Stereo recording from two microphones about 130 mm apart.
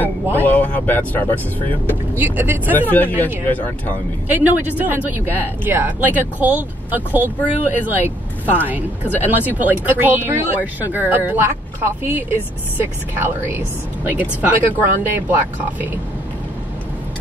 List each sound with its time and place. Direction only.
0.0 s speech: 15° left (ahead or behind)
2.1 s speech: 15° right (ahead or behind)
2.9 s speech: 15° left (ahead or behind)
4.3 s speech: 15° right (ahead or behind)
14.0 s speech: 15° right (ahead or behind)